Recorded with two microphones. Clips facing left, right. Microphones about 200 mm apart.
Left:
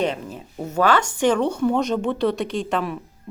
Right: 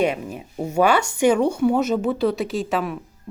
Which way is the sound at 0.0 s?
10° right (ahead or behind).